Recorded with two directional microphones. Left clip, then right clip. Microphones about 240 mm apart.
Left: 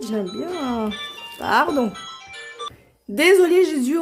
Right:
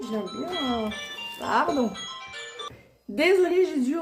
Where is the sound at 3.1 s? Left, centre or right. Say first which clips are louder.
Left 6 dB; left.